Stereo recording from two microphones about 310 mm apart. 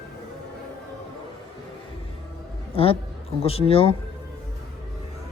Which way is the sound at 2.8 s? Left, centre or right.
Centre.